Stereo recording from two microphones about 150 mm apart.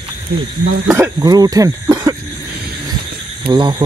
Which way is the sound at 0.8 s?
15° right (ahead or behind).